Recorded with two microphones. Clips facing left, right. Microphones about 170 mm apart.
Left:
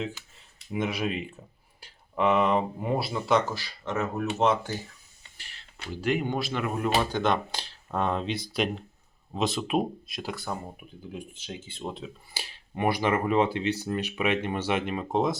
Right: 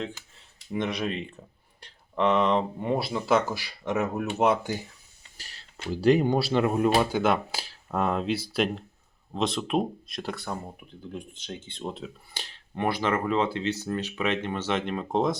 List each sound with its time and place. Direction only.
0.7 s speech: 5° left (ahead or behind); by 4.8 s 10° right (ahead or behind)
5.4 s speech: 40° right (ahead or behind)
6.9 s speech: 5° right (ahead or behind)